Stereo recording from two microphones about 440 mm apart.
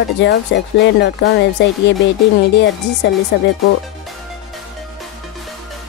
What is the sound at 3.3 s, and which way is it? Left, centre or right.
Speech, left.